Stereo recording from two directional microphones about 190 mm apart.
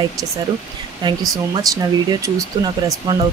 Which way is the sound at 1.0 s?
25° right (ahead or behind).